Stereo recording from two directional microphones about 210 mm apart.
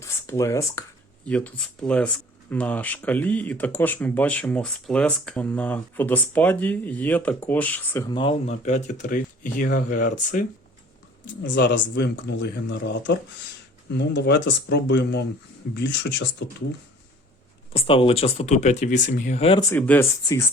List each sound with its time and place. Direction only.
0.0 s speech: 15° left (ahead or behind)
8.1 s speech: 25° left (ahead or behind); by 10.4 s 40° left (ahead or behind)
11.4 s speech: 60° left (ahead or behind)
17.7 s speech: 25° left (ahead or behind)
19.7 s speech: 10° left (ahead or behind)